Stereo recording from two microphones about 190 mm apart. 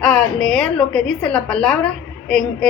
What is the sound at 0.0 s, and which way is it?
A woman's voice, 5° left (ahead or behind).